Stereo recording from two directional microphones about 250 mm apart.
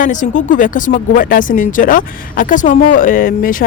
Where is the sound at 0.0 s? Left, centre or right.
Left.